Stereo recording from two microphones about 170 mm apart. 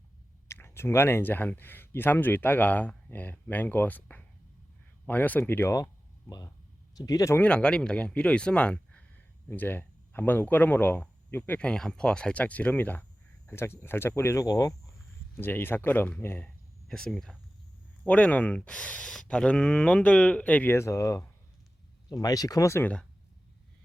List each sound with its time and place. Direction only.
0.4 s speech: 15° left (ahead or behind)